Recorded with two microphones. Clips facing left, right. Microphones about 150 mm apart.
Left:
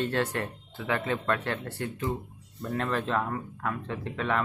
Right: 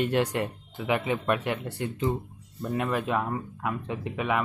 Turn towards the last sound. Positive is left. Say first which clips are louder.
# right 1 dB
turn(degrees=-10)  # may be behind; listen again after turning